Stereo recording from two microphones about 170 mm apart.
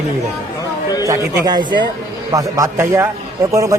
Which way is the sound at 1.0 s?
20° right (ahead or behind).